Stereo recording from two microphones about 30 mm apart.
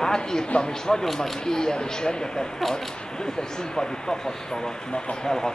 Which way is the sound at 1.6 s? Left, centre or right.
Left.